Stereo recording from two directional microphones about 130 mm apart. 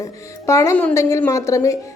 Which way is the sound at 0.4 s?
25° left (ahead or behind).